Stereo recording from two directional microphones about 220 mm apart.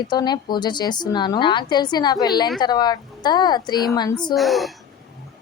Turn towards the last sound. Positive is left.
turn(degrees=0)  # may be behind; listen again after turning